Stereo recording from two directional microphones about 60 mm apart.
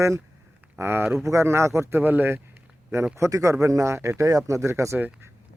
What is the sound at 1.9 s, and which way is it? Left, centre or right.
Speech, right.